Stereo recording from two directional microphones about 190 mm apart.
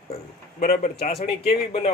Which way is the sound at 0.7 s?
35° left (ahead or behind).